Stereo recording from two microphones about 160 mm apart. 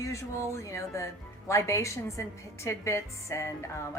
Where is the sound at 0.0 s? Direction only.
20° left (ahead or behind).